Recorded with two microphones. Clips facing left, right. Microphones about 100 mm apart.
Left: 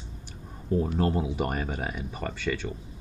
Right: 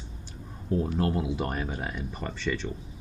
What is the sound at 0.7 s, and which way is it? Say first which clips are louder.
Speech: left 1 dB; 20° left (ahead or behind).